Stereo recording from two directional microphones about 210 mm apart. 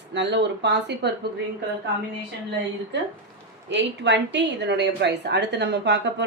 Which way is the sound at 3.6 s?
55° right (ahead or behind).